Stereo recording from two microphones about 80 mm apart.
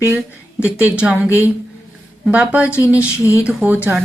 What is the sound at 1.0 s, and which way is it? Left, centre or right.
A woman's voice, centre.